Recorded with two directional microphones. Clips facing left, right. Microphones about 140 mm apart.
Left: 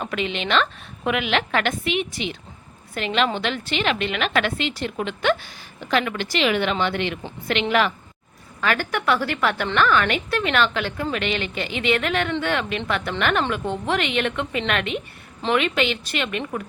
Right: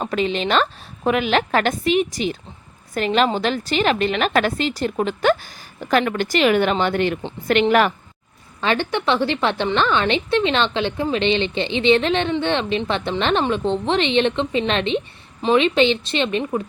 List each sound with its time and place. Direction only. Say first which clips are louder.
0.0 s a woman's voice: right 5 dB; 35° right (ahead or behind)
8.6 s a woman's voice: right 2 dB; 25° right (ahead or behind)